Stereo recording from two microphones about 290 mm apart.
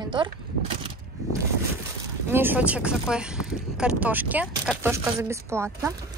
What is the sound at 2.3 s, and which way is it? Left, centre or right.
Speech, centre.